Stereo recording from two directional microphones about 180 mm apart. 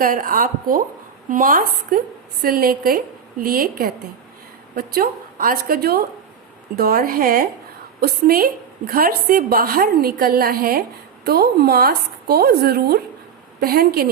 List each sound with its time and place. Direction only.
0.0 s a woman's voice: 50° right (ahead or behind)